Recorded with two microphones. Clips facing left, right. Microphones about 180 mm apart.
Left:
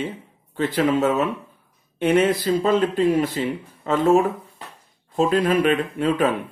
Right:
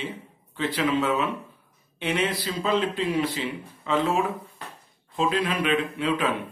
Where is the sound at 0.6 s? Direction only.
45° left (ahead or behind).